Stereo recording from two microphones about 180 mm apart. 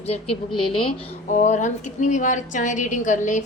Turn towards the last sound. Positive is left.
turn(degrees=45)  # may be behind; listen again after turning